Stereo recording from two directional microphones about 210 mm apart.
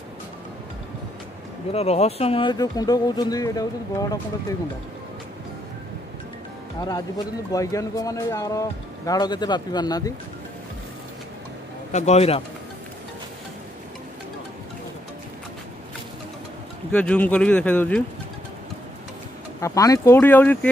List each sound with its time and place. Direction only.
1.7 s speech: 30° left (ahead or behind)
6.8 s a man's voice: 20° left (ahead or behind)
11.9 s speech: 35° left (ahead or behind)
16.9 s a man's voice: 5° left (ahead or behind)
19.6 s a man's voice: 15° left (ahead or behind)